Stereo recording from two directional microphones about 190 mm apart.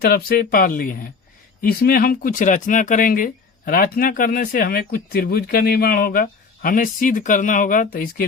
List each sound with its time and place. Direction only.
0.0 s speech: 55° left (ahead or behind)